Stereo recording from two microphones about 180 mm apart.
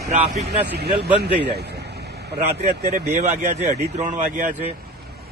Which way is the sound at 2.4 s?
40° right (ahead or behind).